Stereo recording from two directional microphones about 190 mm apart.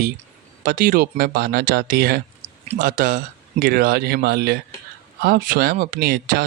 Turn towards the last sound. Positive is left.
turn(degrees=-55)  # may be behind; listen again after turning